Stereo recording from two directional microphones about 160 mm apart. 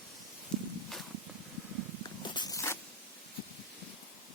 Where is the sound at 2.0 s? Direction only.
30° left (ahead or behind).